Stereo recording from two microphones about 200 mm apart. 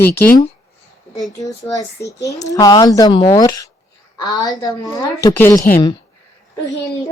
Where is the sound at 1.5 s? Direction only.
15° left (ahead or behind).